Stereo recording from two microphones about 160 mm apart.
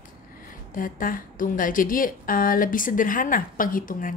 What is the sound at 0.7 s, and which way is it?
A woman's voice, 60° left (ahead or behind).